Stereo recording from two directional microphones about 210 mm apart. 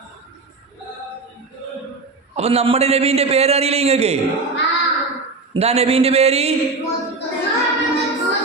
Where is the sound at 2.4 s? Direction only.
30° right (ahead or behind).